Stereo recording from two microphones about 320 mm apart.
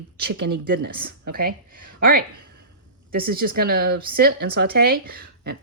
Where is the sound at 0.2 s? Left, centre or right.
Right.